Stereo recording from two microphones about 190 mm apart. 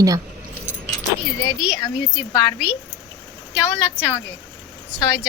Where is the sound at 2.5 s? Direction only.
5° right (ahead or behind).